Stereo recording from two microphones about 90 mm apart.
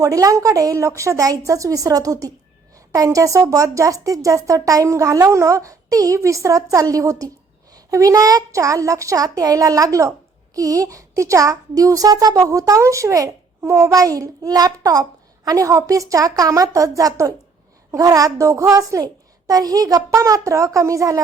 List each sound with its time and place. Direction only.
0.0 s a woman's voice: 40° right (ahead or behind)